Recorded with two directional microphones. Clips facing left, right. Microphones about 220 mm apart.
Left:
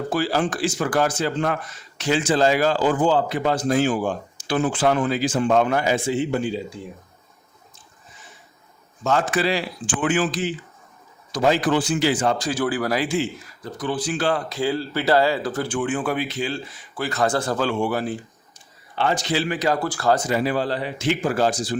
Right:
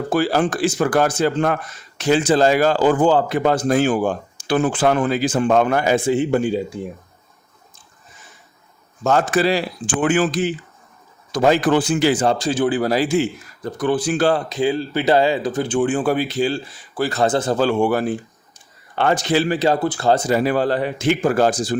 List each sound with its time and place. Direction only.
0.1 s speech: 50° right (ahead or behind)
9.0 s speech: 40° right (ahead or behind)
12.1 s speech: 35° right (ahead or behind)
13.7 s speech: 50° right (ahead or behind)
14.5 s speech: 20° right (ahead or behind)
15.8 s speech: 35° right (ahead or behind)
17.2 s speech: 20° right (ahead or behind)
17.6 s speech: 45° right (ahead or behind)
19.5 s speech: 30° right (ahead or behind)
20.3 s speech: 50° right (ahead or behind)